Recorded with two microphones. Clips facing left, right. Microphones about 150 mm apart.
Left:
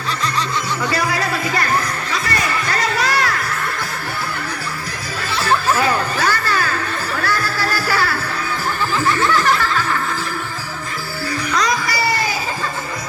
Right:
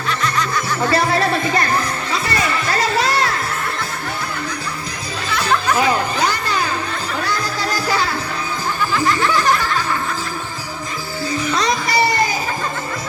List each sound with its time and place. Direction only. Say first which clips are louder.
0.8 s music: right 5 dB; 25° right (ahead or behind)
5.7 s a sound: right 1 dB; 15° right (ahead or behind)
7.2 s music: left 1 dB; 15° right (ahead or behind)
11.5 s music: right 1 dB; 25° right (ahead or behind)